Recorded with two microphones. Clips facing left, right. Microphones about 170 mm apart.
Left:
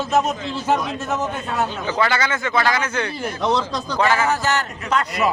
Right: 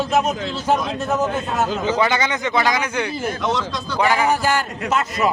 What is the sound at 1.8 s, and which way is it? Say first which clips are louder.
Speech: right 1 dB; 20° right (ahead or behind).